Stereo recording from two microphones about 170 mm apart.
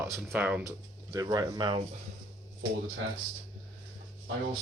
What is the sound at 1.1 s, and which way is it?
Speech, 25° right (ahead or behind).